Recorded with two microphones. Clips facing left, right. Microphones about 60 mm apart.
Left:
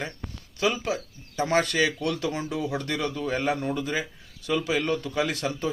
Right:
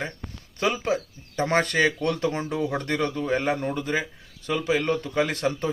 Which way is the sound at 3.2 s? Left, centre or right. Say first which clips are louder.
Left 1 dB; right.